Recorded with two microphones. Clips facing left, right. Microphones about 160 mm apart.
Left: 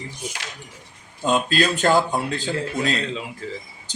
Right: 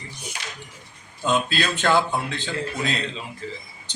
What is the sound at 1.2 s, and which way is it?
Speech, 40° left (ahead or behind).